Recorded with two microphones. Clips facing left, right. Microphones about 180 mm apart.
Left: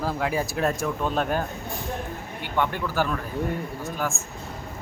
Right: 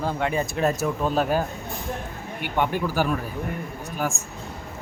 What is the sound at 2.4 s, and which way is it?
A man's voice, 15° right (ahead or behind).